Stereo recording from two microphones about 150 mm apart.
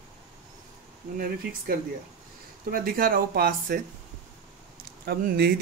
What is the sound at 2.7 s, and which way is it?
Speech, 75° right (ahead or behind).